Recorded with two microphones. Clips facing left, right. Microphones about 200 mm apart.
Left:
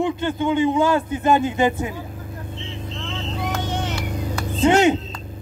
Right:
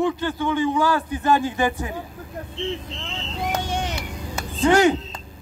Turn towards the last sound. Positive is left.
turn(degrees=25)  # may be behind; listen again after turning